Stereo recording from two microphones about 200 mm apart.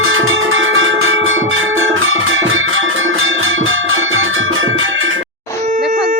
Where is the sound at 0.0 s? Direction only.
85° right.